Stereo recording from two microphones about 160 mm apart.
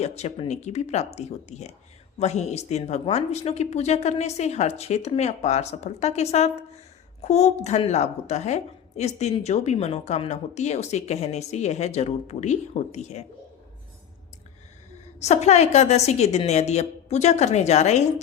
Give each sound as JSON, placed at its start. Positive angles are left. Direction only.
{"t": 0.0, "sound": "a woman's voice", "side_deg": 40}
{"t": 15.2, "sound": "a woman's voice", "side_deg": 45}